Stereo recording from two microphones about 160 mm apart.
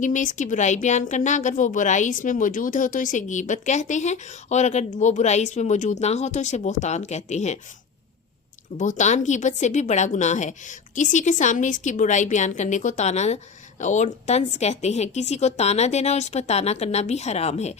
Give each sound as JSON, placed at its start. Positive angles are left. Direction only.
{"t": 0.0, "sound": "a woman's voice", "side_deg": 50}
{"t": 8.8, "sound": "a woman's voice", "side_deg": 50}